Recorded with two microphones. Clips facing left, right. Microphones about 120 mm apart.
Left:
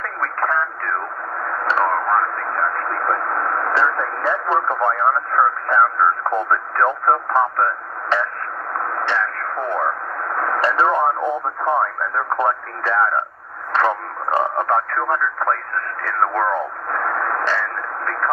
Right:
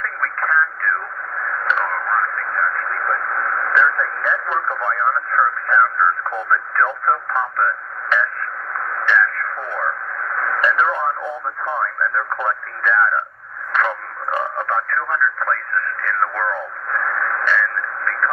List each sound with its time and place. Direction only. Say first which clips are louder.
0.0 s radio: left 1 dB; 35° left (ahead or behind)
13.7 s speech: left 3 dB; 30° left (ahead or behind)